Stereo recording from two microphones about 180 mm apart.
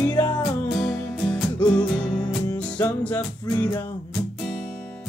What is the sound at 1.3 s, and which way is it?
Music, 5° left (ahead or behind).